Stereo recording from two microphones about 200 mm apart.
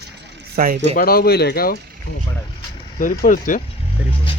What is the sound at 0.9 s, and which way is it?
Speech, 50° left (ahead or behind).